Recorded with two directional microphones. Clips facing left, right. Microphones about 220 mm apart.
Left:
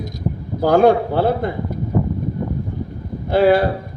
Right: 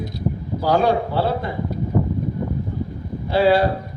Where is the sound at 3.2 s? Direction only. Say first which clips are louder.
Left 3 dB; 50° left (ahead or behind).